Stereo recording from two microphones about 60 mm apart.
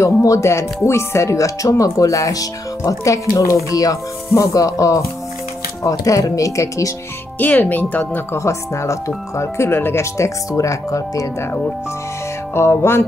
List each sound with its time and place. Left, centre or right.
0.0 s speech: left
3.7 s speech: left
4.3 s speech: left
7.3 s speech: left
8.4 s speech: left
9.4 s speech: left
10.1 s speech: left
12.5 s speech: left